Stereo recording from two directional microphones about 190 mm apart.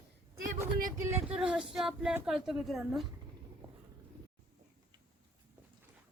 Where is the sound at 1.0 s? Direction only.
10° right (ahead or behind).